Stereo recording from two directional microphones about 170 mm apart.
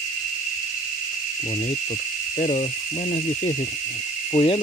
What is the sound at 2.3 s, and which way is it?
Speech, 40° left (ahead or behind).